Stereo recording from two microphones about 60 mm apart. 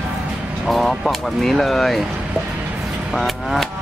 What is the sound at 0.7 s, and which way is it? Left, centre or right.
Speech, centre.